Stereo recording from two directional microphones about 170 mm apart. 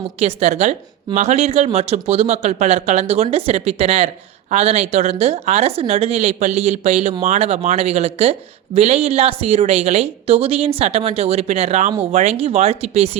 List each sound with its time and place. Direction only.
0.2 s speech: 40° right (ahead or behind)